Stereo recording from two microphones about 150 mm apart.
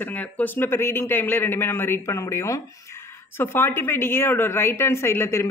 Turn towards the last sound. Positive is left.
turn(degrees=15)  # may be behind; listen again after turning